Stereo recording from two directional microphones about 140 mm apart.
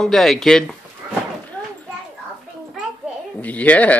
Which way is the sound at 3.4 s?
10° left (ahead or behind).